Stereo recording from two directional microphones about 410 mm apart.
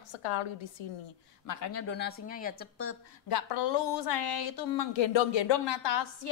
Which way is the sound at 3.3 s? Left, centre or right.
Left.